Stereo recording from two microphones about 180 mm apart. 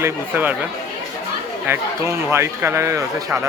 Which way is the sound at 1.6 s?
15° right (ahead or behind).